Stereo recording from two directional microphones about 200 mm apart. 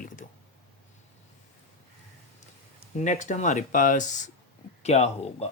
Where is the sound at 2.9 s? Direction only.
40° left (ahead or behind).